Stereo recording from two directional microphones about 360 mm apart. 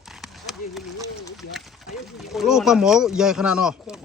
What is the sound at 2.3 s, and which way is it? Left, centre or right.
Speech, centre.